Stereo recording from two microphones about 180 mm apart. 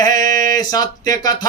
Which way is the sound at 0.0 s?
20° left (ahead or behind).